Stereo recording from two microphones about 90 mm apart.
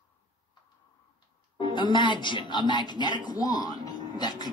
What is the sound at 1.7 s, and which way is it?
A woman's voice, 60° left (ahead or behind).